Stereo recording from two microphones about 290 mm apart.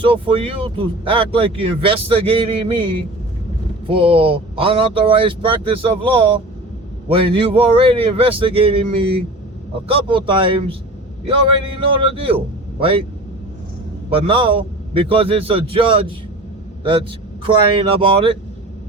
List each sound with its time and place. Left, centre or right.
0.0 s speech: centre
14.1 s speech: centre